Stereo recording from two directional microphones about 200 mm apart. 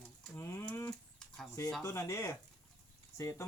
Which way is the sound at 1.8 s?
15° left (ahead or behind).